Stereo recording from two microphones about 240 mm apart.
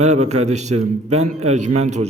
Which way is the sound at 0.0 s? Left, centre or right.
Right.